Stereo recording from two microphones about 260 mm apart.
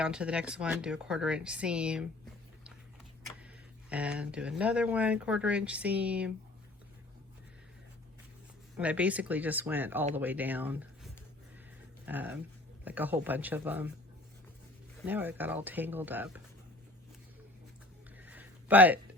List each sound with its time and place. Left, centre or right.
0.0 s speech: centre
3.4 s speech: centre
8.7 s speech: centre
15.0 s speech: centre
18.2 s a sound: centre